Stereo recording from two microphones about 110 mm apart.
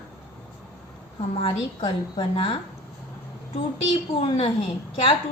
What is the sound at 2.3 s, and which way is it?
Speech, 55° left (ahead or behind).